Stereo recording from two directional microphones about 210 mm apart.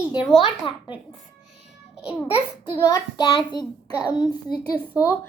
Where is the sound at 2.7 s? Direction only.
15° left (ahead or behind).